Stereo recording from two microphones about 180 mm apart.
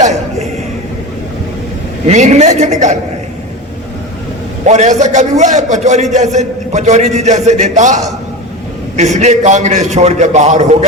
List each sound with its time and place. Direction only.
2.0 s a man's voice: 40° right (ahead or behind)
4.6 s a man's voice: 40° right (ahead or behind)